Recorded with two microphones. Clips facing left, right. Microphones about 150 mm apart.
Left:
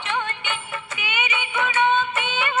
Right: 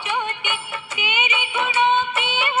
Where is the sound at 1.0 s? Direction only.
20° right (ahead or behind).